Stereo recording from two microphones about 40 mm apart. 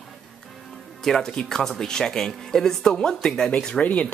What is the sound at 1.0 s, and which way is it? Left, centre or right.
Speech, centre.